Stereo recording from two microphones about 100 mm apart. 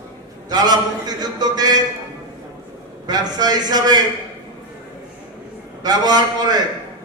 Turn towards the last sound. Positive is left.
turn(degrees=-45)  # may be behind; listen again after turning